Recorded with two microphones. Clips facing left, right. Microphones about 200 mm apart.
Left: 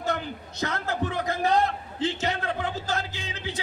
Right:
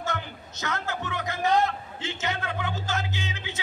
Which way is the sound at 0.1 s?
35° left (ahead or behind).